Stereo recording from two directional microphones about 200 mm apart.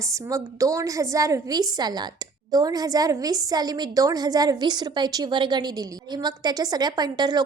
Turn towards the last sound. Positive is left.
turn(degrees=-20)  # may be behind; listen again after turning